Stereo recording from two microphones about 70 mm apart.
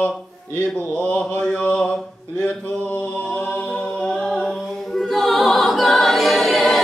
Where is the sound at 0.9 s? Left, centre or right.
Centre.